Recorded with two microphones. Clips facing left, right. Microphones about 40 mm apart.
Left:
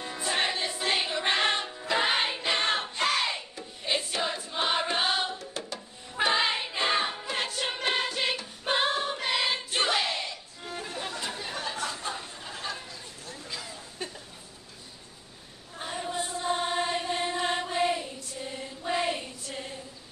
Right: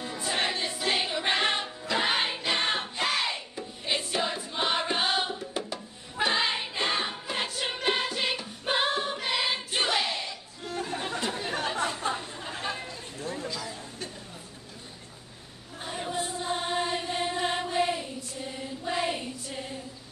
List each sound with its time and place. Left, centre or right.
0.0 s music: centre
6.1 s music: centre
11.1 s a sound: centre
11.5 s a sound: right
12.5 s chatter: right
16.1 s chant: centre
18.8 s child singing: centre